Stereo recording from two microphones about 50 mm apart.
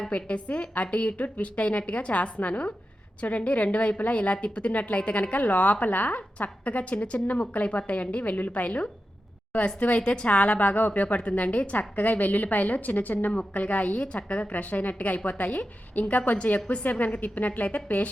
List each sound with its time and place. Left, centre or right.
0.1 s a woman's voice: left